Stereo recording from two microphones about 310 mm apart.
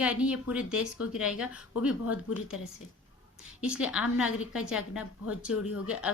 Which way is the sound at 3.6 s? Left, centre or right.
Centre.